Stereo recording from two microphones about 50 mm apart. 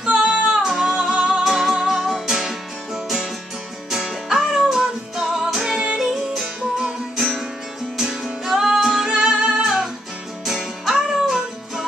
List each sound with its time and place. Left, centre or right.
0.0 s music: centre
0.6 s music: centre
1.1 s music: centre
1.4 s music: centre
6.4 s music: centre
8.0 s music: centre